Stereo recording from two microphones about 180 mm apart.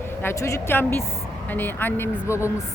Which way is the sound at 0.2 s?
15° left (ahead or behind).